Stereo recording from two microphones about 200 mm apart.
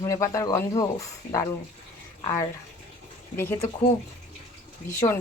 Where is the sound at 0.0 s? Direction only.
15° left (ahead or behind).